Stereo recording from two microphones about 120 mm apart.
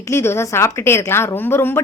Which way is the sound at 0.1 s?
20° left (ahead or behind).